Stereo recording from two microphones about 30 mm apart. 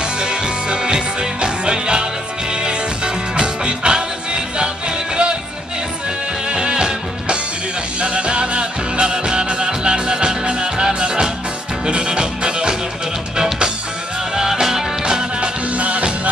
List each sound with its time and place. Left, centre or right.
0.0 s music: right
6.5 s music: right
14.3 s music: centre
15.7 s music: right